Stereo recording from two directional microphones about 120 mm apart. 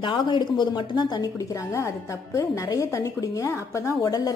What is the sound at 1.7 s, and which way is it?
A woman's voice, 25° left (ahead or behind).